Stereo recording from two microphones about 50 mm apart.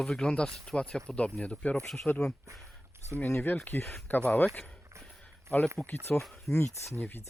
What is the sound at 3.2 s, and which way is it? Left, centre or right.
Speech, left.